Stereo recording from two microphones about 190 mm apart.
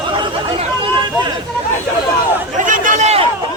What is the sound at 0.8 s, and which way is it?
Chatter, 25° right (ahead or behind).